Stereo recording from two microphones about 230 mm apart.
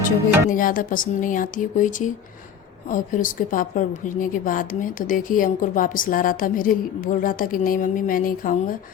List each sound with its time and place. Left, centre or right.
0.5 s a woman's voice: left